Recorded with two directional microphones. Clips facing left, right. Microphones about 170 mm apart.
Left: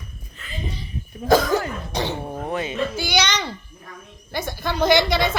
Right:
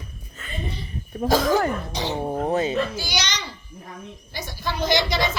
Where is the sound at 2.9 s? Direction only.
55° left (ahead or behind).